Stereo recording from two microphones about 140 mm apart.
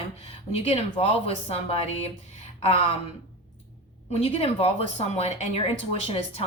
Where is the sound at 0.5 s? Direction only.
40° left (ahead or behind).